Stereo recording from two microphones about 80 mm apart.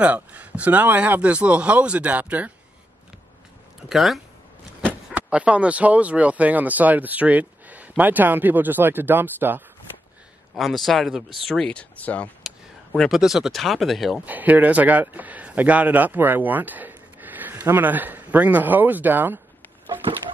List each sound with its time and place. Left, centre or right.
0.0 s speech: centre
3.9 s speech: centre
5.1 s a man's voice: centre
10.5 s speech: centre
12.0 s speech: centre
12.4 s a sound: centre
13.1 s speech: centre
14.2 s a man's voice: right